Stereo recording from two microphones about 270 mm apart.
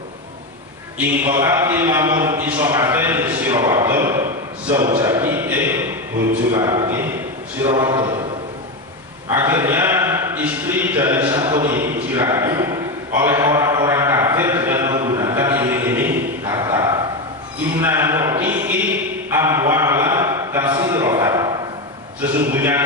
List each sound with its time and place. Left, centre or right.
0.9 s a man's voice: centre
9.3 s a sound: centre
22.4 s a man's voice: centre